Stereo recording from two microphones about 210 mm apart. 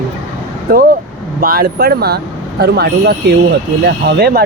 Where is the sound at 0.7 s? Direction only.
45° right (ahead or behind).